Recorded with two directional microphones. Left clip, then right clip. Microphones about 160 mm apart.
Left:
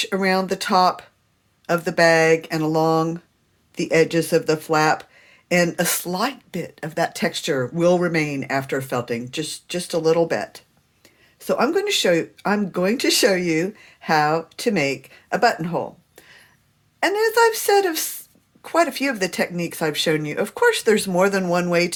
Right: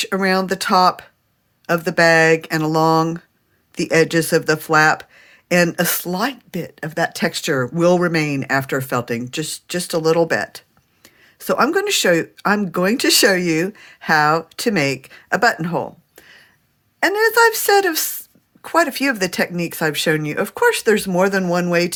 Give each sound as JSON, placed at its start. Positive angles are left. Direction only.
{"t": 0.0, "sound": "speech", "side_deg": -50}
{"t": 16.2, "sound": "a sound", "side_deg": -40}
{"t": 17.0, "sound": "speech", "side_deg": -50}